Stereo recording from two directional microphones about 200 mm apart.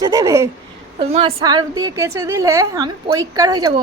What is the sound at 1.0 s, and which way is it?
A woman's voice, 30° right (ahead or behind).